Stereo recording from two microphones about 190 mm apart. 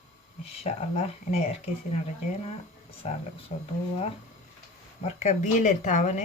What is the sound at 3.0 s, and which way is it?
Speech, 35° left (ahead or behind).